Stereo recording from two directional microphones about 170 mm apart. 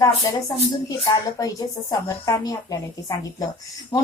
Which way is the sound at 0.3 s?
20° left (ahead or behind).